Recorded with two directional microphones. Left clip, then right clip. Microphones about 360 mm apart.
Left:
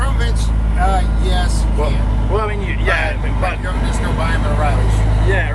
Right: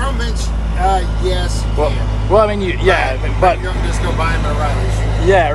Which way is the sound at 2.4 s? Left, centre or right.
Centre.